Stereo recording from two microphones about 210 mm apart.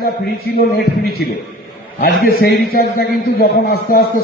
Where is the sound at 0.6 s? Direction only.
50° left (ahead or behind).